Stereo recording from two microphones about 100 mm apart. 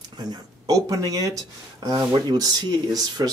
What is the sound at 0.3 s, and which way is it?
A man's voice, 35° right (ahead or behind).